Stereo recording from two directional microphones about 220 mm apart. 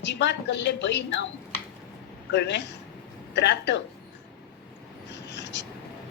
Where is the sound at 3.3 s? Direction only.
50° left (ahead or behind).